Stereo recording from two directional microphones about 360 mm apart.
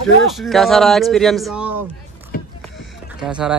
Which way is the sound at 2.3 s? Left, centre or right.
Left.